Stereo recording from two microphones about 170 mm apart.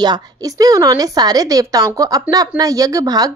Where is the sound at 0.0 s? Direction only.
25° right (ahead or behind).